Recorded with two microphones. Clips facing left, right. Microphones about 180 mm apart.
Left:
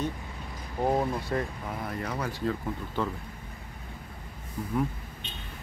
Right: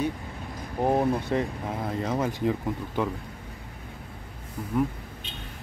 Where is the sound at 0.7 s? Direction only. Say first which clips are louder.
Right 3 dB; 20° right (ahead or behind).